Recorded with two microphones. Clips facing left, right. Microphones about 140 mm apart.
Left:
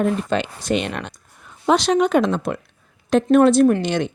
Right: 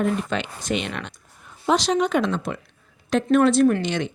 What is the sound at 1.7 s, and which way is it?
Speech, 60° left (ahead or behind).